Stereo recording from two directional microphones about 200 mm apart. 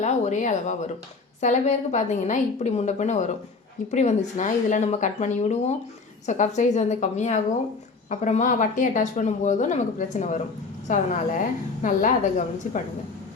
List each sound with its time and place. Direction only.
0.0 s speech: 35° left (ahead or behind)